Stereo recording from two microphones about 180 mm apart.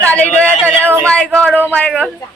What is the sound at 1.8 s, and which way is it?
Speech, 5° left (ahead or behind).